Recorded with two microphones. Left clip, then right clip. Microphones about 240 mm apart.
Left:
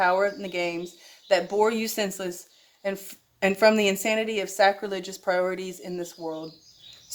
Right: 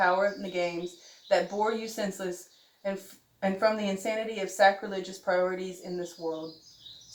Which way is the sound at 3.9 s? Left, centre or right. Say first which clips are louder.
Left 6 dB; left.